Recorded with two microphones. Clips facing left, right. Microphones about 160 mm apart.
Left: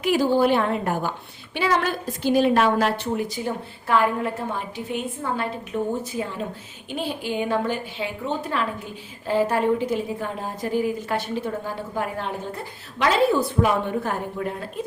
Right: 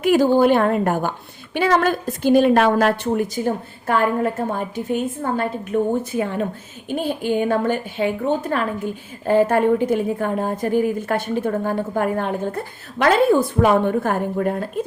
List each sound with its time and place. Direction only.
0.0 s a woman's voice: 50° right (ahead or behind)